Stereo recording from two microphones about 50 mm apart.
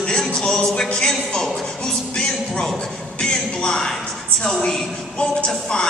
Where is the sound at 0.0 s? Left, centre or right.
Centre.